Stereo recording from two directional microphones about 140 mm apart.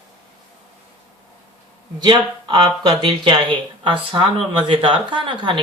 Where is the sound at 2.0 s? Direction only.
35° right (ahead or behind).